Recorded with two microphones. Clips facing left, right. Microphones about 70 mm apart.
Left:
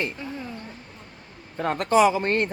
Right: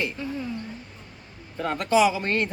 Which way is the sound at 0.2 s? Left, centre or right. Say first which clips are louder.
Right 3 dB; left.